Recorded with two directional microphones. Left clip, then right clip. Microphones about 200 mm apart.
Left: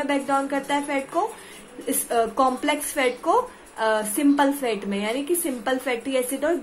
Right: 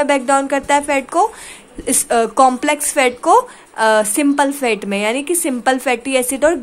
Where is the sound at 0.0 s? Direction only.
45° right (ahead or behind).